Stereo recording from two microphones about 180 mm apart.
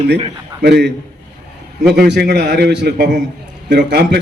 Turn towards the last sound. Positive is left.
turn(degrees=-70)  # may be behind; listen again after turning